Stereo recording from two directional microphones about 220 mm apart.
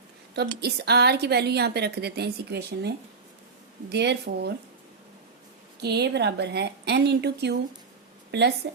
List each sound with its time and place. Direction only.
0.6 s a woman's voice: 50° right (ahead or behind)
5.8 s a woman's voice: 50° right (ahead or behind)